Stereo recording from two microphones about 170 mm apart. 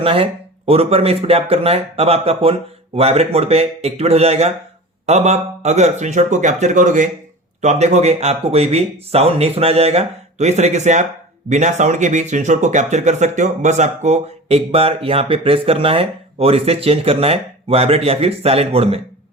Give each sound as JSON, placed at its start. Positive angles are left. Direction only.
{"t": 0.0, "sound": "speech", "side_deg": -35}